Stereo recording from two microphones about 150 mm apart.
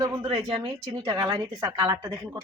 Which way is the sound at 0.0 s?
30° right (ahead or behind).